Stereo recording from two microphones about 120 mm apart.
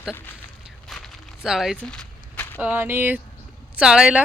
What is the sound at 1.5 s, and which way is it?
Speech, 5° right (ahead or behind).